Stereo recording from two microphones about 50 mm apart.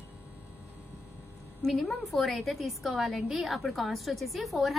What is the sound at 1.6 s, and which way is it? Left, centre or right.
A woman's voice, centre.